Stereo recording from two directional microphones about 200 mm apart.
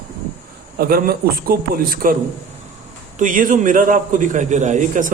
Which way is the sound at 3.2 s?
40° right (ahead or behind).